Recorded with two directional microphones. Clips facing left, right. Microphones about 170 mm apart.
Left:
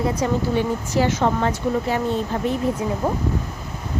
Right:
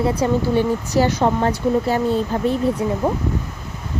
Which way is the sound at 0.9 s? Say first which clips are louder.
Even; 35° right (ahead or behind).